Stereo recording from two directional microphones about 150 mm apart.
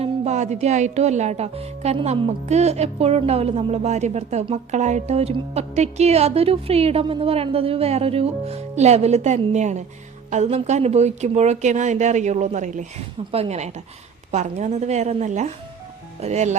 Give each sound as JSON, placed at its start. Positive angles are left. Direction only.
{"t": 0.0, "sound": "speech", "side_deg": -50}